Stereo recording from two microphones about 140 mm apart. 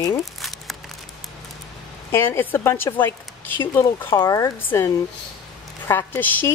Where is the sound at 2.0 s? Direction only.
15° left (ahead or behind).